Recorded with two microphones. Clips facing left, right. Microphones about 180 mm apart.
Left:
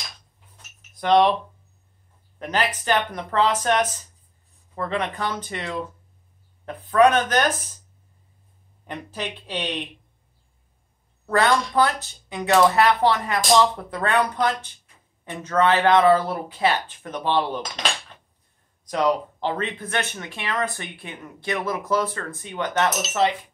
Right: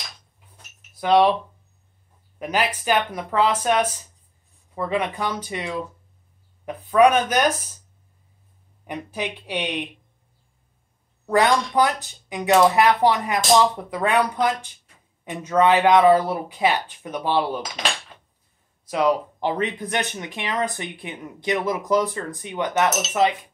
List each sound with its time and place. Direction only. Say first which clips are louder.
0.9 s speech: right 1 dB; 5° right (ahead or behind)
2.3 s speech: right 1 dB; 10° right (ahead or behind)
8.8 s speech: right 2 dB; 10° right (ahead or behind)
11.2 s speech: right 1 dB; 15° right (ahead or behind)
18.9 s speech: right 1 dB; 10° right (ahead or behind)